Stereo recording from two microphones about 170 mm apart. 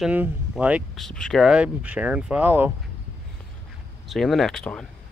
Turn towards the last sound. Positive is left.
turn(degrees=5)  # may be behind; listen again after turning